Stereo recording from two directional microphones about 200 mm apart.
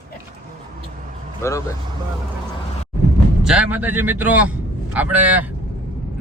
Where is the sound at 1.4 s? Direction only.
15° left (ahead or behind).